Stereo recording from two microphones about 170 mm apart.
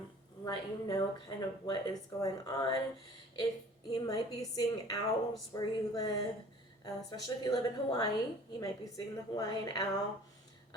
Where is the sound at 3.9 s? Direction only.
20° left (ahead or behind).